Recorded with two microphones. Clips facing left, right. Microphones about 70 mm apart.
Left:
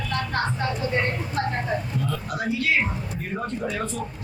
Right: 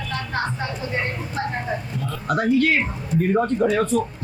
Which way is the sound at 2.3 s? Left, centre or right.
Right.